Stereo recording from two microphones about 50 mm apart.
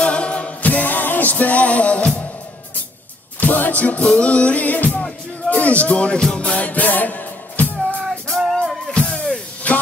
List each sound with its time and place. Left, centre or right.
0.0 s music: left
3.3 s music: left
5.5 s speech: left
6.4 s music: left
8.1 s music: centre
9.1 s music: centre
9.6 s music: left